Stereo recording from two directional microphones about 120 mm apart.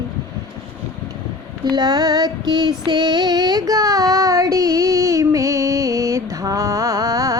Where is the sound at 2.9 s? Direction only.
40° right (ahead or behind).